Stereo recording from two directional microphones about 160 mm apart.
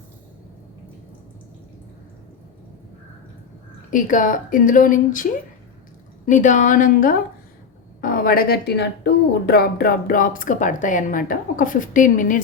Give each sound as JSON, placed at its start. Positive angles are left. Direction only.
{"t": 3.9, "sound": "a woman's voice", "side_deg": 55}